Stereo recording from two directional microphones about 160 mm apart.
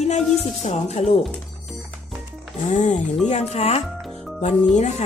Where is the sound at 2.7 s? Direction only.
50° left (ahead or behind).